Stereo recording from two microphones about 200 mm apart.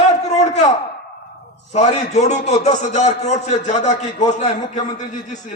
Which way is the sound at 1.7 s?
35° left (ahead or behind).